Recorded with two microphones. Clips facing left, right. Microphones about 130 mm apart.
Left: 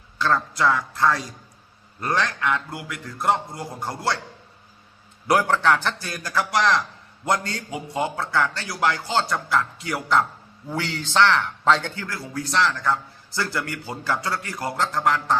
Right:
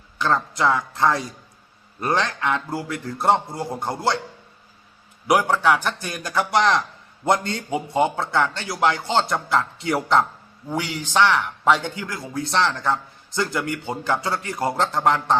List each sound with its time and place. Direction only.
0.2 s a man's voice: 15° right (ahead or behind)
5.3 s a man's voice: 10° right (ahead or behind)
10.7 s a man's voice: 15° right (ahead or behind)